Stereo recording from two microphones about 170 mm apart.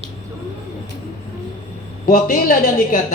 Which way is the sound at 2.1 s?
60° left (ahead or behind).